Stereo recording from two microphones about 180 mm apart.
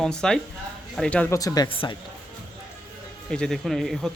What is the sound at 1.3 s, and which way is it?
Speech, 20° left (ahead or behind).